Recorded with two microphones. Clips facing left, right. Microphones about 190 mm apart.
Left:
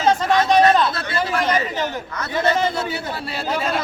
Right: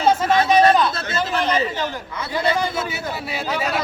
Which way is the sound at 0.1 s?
5° right (ahead or behind).